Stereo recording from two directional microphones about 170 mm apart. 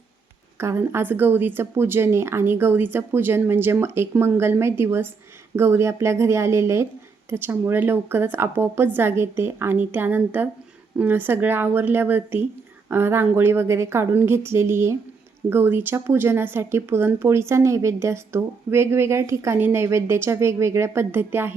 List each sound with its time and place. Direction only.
0.6 s speech: 15° right (ahead or behind)